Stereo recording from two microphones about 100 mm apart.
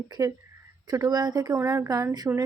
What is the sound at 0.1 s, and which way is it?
Speech, 35° right (ahead or behind).